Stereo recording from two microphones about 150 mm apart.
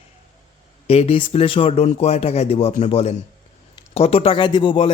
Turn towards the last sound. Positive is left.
turn(degrees=35)  # may be behind; listen again after turning